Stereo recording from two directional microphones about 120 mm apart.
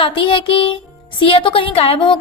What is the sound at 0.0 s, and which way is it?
A woman's voice, 45° left (ahead or behind).